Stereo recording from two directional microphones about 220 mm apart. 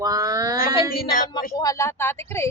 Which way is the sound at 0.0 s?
15° right (ahead or behind).